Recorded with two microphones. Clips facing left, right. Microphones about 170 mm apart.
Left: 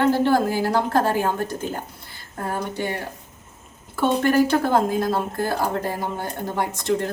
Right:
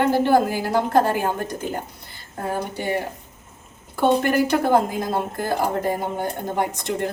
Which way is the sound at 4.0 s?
15° right (ahead or behind).